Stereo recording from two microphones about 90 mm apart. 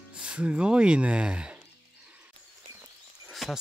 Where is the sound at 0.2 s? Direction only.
10° right (ahead or behind).